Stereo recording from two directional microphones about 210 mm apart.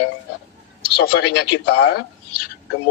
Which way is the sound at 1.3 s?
55° left (ahead or behind).